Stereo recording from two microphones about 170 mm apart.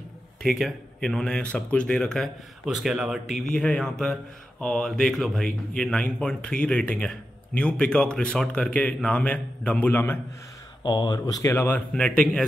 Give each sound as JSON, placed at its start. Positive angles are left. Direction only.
{"t": 0.4, "sound": "speech", "side_deg": 0}
{"t": 10.8, "sound": "speech", "side_deg": 25}